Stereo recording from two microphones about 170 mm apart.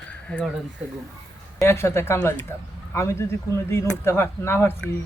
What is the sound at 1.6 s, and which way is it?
Speech, 15° left (ahead or behind).